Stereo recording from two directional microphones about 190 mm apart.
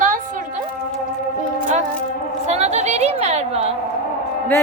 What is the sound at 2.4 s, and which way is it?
A woman's voice, 35° right (ahead or behind).